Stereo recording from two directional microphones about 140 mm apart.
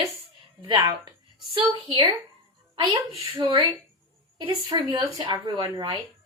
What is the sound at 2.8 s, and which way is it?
A woman's voice, 35° right (ahead or behind).